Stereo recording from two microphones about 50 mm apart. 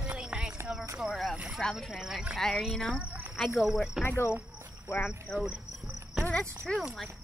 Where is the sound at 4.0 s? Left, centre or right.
Left.